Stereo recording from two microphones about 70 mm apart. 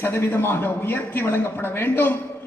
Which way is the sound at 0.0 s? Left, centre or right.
Left.